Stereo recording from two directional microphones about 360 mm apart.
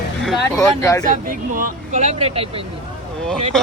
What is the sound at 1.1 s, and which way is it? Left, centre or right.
Speech, right.